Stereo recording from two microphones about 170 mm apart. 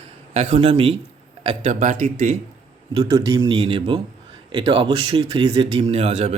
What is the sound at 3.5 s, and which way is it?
Speech, 35° right (ahead or behind).